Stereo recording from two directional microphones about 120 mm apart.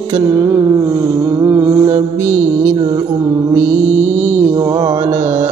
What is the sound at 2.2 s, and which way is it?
Music, 20° right (ahead or behind).